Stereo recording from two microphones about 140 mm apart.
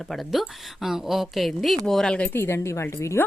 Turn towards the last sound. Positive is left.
turn(degrees=20)  # may be behind; listen again after turning